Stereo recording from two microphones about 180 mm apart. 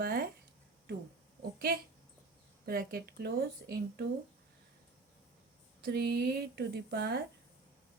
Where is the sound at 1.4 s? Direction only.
55° right (ahead or behind).